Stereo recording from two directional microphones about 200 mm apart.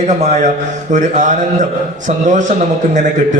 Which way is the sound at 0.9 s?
40° right (ahead or behind).